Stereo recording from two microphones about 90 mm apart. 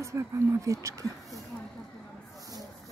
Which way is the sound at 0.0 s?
35° right (ahead or behind).